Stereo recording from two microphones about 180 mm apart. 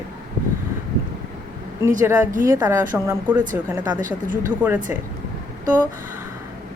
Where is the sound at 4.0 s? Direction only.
45° right (ahead or behind).